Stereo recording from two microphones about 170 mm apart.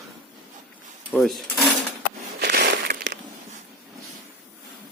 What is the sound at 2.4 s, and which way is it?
Crushing, 65° right (ahead or behind).